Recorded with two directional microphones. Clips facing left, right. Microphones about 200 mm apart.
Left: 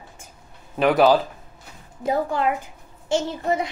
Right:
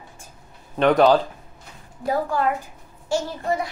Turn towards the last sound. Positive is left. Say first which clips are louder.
# left 1 dB
turn(degrees=20)  # may be behind; listen again after turning